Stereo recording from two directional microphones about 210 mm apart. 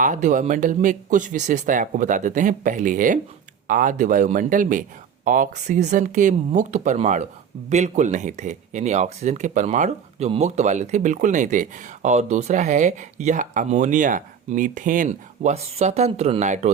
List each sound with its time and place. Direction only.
0.0 s speech: 35° right (ahead or behind)